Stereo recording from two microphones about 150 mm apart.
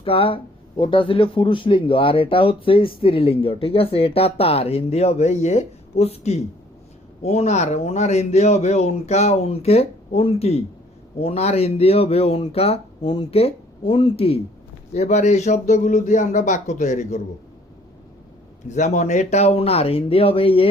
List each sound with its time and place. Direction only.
0.0 s speech: 40° left (ahead or behind); by 17.2 s 55° left (ahead or behind)
18.7 s speech: 50° left (ahead or behind)